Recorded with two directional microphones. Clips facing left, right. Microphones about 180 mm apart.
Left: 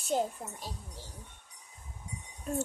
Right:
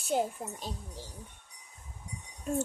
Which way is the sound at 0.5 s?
20° right (ahead or behind).